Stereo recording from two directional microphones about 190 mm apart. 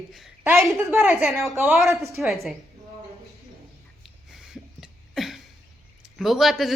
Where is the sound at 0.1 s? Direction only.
5° right (ahead or behind).